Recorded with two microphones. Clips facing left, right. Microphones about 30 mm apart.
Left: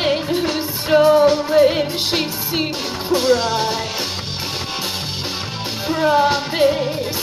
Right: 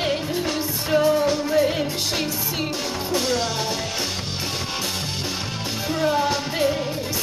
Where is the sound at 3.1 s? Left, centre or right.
Centre.